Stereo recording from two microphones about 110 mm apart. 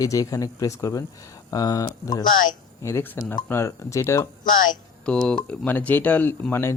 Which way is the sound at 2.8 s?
20° left (ahead or behind).